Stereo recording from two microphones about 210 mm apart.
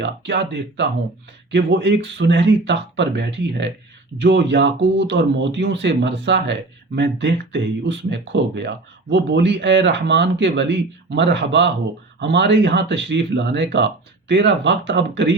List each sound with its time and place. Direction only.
0.0 s speech: 55° right (ahead or behind)